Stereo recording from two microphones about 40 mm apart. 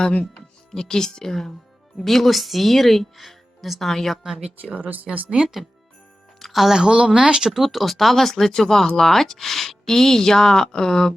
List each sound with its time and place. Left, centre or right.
0.3 s speech: centre
4.4 s speech: right
5.1 s speech: centre
6.4 s speech: centre